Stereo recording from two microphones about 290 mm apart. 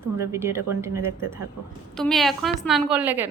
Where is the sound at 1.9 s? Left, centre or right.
Centre.